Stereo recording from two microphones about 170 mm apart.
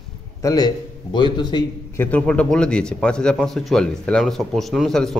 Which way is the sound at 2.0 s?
10° left (ahead or behind).